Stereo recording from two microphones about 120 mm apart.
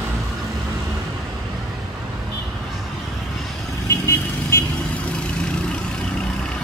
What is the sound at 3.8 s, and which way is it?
Vehicle, 20° left (ahead or behind).